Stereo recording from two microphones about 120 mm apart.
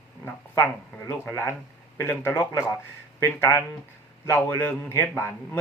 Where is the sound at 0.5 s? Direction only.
20° left (ahead or behind).